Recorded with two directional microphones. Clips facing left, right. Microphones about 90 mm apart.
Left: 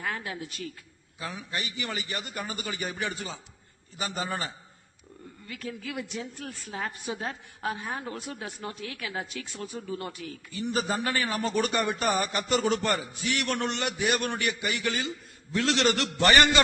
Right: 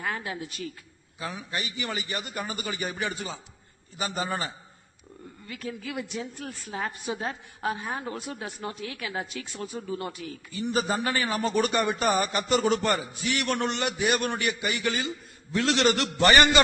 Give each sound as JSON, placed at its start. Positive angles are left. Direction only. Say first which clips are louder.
{"t": 0.0, "sound": "a sound", "louder": "right 2 dB", "side_deg": -15}
{"t": 1.2, "sound": "a man's voice", "louder": "right 1 dB", "side_deg": -15}
{"t": 5.5, "sound": "a man's voice", "louder": "right 1 dB", "side_deg": -15}